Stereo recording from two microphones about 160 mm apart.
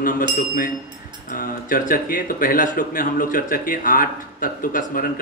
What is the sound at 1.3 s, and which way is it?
Speech, 65° left (ahead or behind).